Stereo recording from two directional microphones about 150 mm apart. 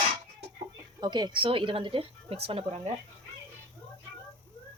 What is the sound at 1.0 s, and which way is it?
A woman's voice, 30° right (ahead or behind).